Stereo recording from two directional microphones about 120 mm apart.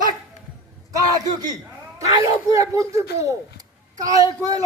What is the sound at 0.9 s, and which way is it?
A man's voice, 30° right (ahead or behind).